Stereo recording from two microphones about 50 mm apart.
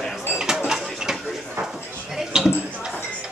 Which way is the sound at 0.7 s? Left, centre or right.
Centre.